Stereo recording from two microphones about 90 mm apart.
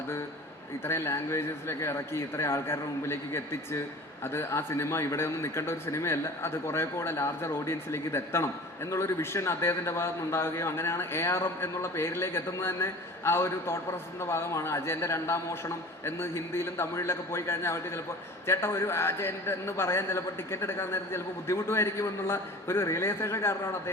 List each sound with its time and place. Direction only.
0.9 s a man's voice: 30° left (ahead or behind)